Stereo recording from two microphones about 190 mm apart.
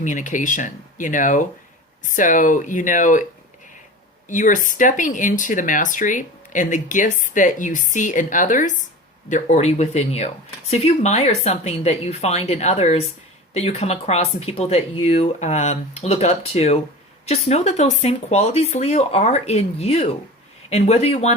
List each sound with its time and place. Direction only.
0.0 s speech: 40° left (ahead or behind)
4.3 s speech: 45° left (ahead or behind)